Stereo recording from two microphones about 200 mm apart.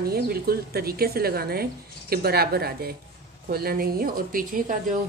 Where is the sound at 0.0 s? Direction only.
50° right (ahead or behind).